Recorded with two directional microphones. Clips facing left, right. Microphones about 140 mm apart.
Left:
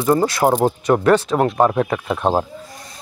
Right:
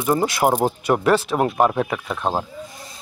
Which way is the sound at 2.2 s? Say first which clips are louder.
Left 5 dB; 20° left (ahead or behind).